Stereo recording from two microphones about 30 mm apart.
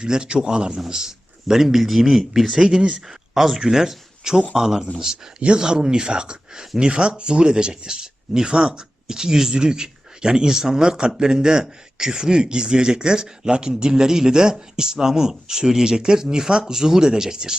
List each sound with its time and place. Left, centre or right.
0.0 s speech: right
0.9 s speech: centre